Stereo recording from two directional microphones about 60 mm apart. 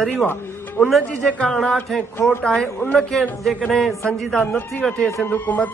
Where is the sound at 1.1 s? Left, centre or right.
Left.